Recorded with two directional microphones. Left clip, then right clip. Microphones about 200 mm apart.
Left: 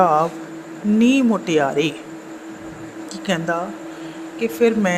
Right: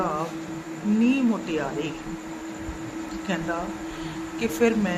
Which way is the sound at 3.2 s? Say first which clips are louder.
Left 8 dB; 30° left (ahead or behind).